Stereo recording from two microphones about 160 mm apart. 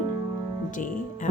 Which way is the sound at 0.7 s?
55° left (ahead or behind).